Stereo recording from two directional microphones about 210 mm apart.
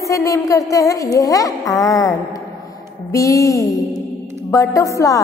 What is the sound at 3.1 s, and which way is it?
A woman's voice, 15° left (ahead or behind).